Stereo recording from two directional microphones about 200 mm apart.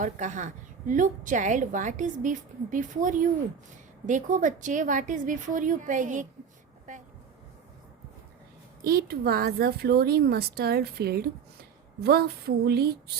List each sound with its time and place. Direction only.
0.0 s a woman's voice: 40° right (ahead or behind)
8.8 s speech: 50° right (ahead or behind)